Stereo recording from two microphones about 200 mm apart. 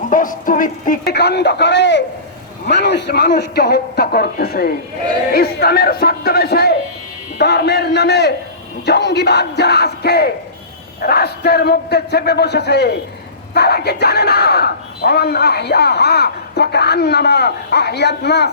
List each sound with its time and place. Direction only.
0.1 s a man's voice: 40° left (ahead or behind)